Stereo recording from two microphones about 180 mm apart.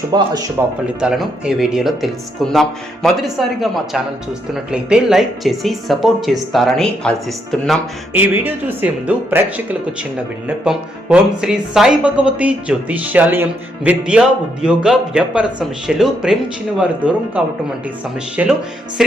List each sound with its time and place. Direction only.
0.1 s speech: 25° right (ahead or behind)
0.9 s a man's voice: 5° right (ahead or behind)
8.1 s a man's voice: 10° right (ahead or behind)